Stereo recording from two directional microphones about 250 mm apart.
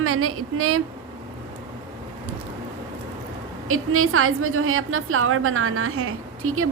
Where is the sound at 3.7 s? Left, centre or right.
Right.